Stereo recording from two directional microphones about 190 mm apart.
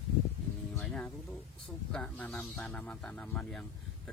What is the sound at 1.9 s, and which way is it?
Speech, 5° left (ahead or behind).